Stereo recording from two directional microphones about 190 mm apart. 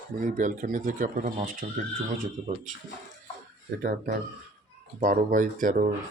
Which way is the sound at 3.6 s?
50° right (ahead or behind).